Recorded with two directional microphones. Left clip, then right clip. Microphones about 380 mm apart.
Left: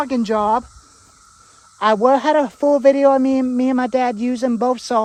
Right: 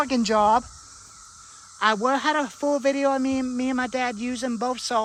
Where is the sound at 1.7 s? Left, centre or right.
Centre.